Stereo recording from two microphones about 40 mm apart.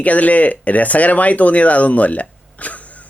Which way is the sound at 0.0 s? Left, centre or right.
Left.